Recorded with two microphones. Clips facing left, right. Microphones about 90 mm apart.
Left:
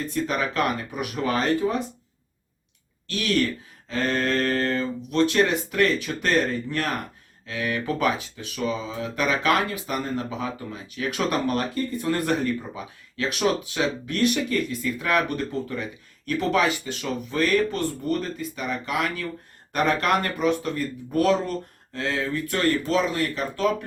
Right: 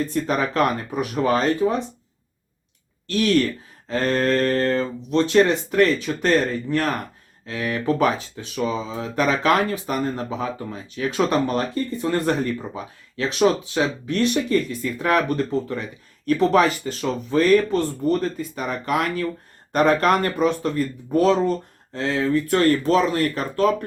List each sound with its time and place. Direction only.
0.1 s speech: 35° right (ahead or behind)
3.1 s speech: 40° right (ahead or behind)
5.1 s speech: 25° right (ahead or behind)
18.5 s speech: 45° right (ahead or behind)